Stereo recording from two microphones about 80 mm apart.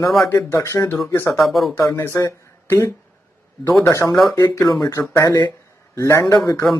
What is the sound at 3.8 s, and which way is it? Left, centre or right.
A man's voice, left.